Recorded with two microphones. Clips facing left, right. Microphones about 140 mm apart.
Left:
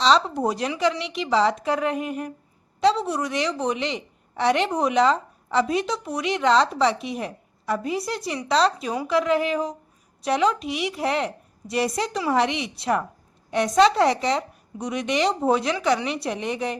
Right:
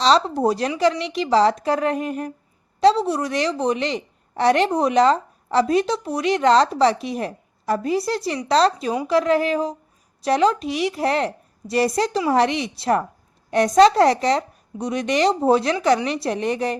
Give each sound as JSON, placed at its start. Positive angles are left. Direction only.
{"t": 0.0, "sound": "a woman's voice", "side_deg": -35}